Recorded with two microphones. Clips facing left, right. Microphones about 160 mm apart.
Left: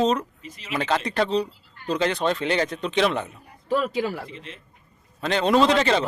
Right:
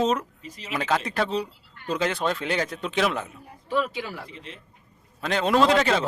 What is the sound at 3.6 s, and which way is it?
Speech, 45° left (ahead or behind).